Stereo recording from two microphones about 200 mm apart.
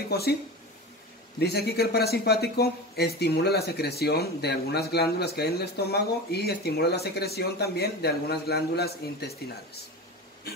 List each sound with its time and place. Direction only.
0.1 s speech: 50° left (ahead or behind)
1.4 s speech: 55° left (ahead or behind)